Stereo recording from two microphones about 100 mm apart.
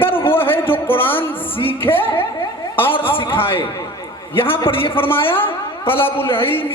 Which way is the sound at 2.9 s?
65° left (ahead or behind).